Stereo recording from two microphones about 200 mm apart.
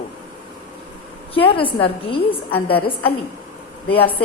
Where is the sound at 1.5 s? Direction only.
25° left (ahead or behind).